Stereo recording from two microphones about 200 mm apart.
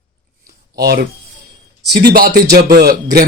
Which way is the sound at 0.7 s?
50° right (ahead or behind).